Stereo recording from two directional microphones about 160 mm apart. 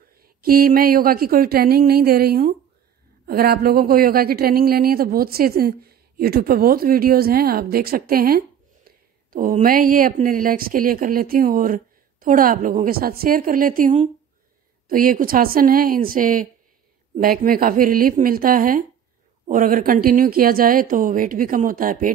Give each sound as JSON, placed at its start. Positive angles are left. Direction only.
{"t": 0.2, "sound": "a woman's voice", "side_deg": -65}
{"t": 14.9, "sound": "speech", "side_deg": -60}